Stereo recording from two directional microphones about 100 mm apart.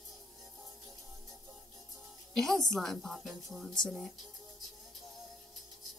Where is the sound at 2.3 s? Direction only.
5° left (ahead or behind).